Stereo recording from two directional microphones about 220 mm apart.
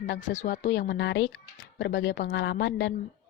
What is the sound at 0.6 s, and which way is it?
Speech, 50° left (ahead or behind).